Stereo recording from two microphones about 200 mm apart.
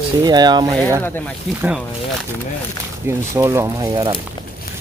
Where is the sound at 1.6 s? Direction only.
5° right (ahead or behind).